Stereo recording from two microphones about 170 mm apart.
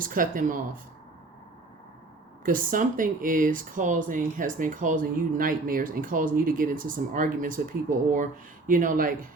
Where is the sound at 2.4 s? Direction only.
55° right (ahead or behind).